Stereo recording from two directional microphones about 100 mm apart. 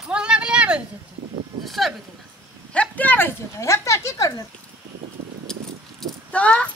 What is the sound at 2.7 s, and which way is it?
Speech, 15° left (ahead or behind).